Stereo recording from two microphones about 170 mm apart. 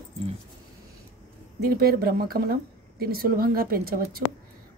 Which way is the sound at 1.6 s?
60° right (ahead or behind).